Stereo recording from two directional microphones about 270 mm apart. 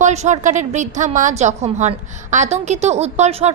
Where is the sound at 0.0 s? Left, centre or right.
Right.